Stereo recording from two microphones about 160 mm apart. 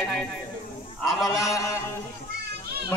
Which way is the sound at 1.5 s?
20° left (ahead or behind).